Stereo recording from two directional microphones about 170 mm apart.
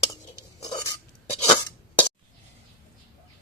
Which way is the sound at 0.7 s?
25° left (ahead or behind).